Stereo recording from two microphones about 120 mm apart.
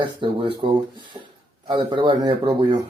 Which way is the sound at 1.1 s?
60° right (ahead or behind).